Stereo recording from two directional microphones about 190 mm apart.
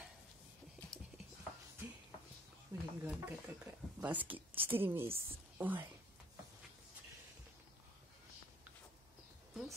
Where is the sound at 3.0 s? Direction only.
10° right (ahead or behind).